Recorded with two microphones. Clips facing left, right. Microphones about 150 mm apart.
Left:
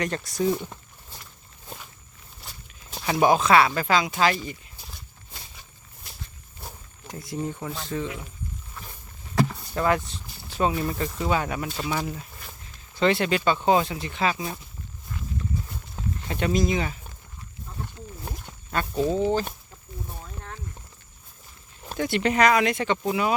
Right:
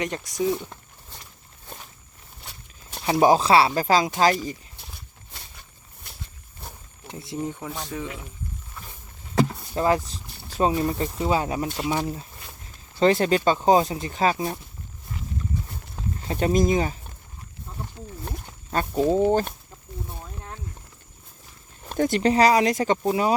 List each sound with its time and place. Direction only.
0.0 s speech: 15° right (ahead or behind)
0.5 s speech: 5° left (ahead or behind)
2.4 s walk: centre (ahead or behind)
3.1 s speech: 35° right (ahead or behind)
7.1 s speech: 25° right (ahead or behind)
7.7 s speech: 15° right (ahead or behind)
9.7 s speech: 30° right (ahead or behind)
16.2 s speech: 35° right (ahead or behind)
18.8 s speech: 40° right (ahead or behind)
19.1 s speech: 50° right (ahead or behind)
21.9 s speech: 45° right (ahead or behind)